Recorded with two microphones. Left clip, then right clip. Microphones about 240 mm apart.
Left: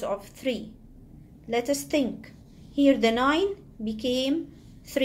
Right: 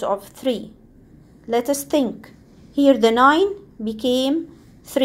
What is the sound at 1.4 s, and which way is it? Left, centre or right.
A woman's voice, right.